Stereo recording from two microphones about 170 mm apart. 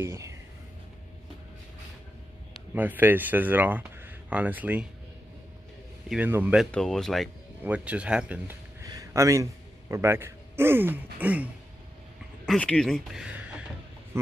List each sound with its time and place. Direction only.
0.0 s speech: 15° right (ahead or behind)
2.7 s speech: 10° right (ahead or behind)
6.0 s speech: 10° right (ahead or behind)
7.6 s speech: 10° right (ahead or behind)
8.8 s a man's voice: 20° right (ahead or behind)
12.4 s speech: 5° left (ahead or behind)
14.1 s speech: 15° right (ahead or behind)